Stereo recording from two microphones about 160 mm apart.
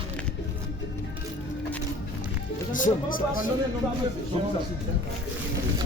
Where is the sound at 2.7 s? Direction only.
55° left (ahead or behind).